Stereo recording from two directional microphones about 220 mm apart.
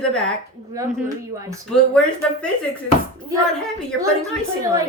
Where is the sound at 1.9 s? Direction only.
5° left (ahead or behind).